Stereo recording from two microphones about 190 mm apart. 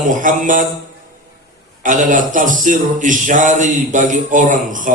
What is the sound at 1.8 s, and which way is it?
Speech, 45° right (ahead or behind).